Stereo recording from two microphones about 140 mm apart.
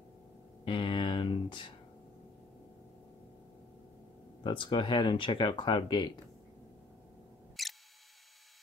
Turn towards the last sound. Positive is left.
turn(degrees=0)  # may be behind; listen again after turning